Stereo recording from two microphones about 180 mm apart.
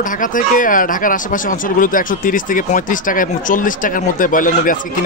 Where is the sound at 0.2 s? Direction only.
45° left (ahead or behind).